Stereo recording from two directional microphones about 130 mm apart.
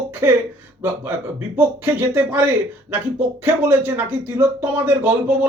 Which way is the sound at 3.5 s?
15° right (ahead or behind).